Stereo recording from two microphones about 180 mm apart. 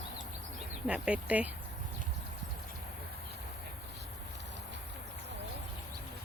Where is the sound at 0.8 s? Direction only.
5° right (ahead or behind).